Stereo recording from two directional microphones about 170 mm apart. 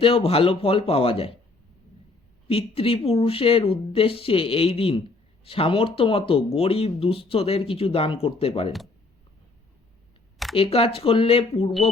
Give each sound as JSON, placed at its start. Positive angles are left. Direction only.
{"t": 0.0, "sound": "speech", "side_deg": 35}
{"t": 2.5, "sound": "speech", "side_deg": 35}
{"t": 10.5, "sound": "speech", "side_deg": 35}